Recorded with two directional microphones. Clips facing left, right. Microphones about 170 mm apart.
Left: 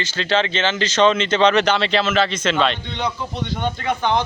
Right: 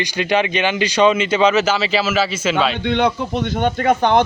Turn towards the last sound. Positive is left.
turn(degrees=-50)  # may be behind; listen again after turning